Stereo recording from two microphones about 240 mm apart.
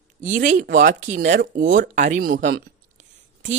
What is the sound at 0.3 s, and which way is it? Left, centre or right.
Speech, right.